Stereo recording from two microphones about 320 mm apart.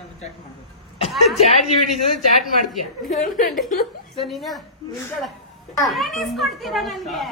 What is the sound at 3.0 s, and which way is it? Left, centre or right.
Speech, left.